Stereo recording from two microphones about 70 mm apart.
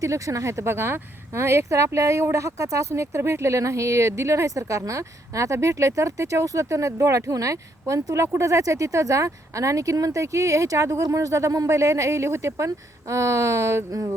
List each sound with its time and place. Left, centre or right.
0.0 s speech: right